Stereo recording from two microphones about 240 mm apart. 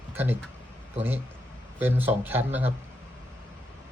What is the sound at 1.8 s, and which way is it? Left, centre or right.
Speech, centre.